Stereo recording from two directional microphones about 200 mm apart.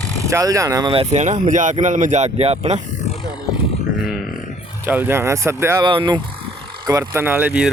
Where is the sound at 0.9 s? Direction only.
30° right (ahead or behind).